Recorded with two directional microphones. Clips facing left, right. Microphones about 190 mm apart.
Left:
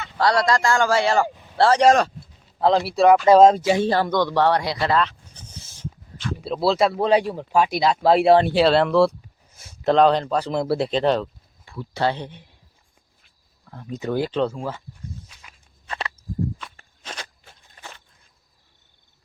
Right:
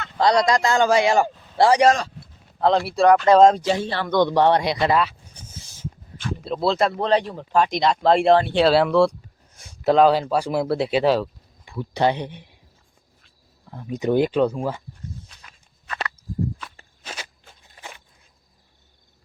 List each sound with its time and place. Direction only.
0.2 s speech: 20° right (ahead or behind)
1.3 s vehicle: 15° left (ahead or behind)
1.5 s speech: 15° right (ahead or behind)
2.6 s speech: centre (ahead or behind)
3.8 s a man's voice: 40° left (ahead or behind)
4.2 s speech: 20° right (ahead or behind)
5.6 s a sound: centre (ahead or behind)
6.4 s speech: 5° left (ahead or behind)
11.6 s speech: 15° right (ahead or behind)
13.7 s speech: 15° right (ahead or behind)
15.3 s walk: 10° left (ahead or behind)
17.0 s a sound: 10° right (ahead or behind)